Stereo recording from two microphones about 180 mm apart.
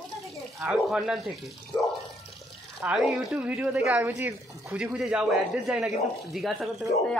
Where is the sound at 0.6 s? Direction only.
Centre (ahead or behind).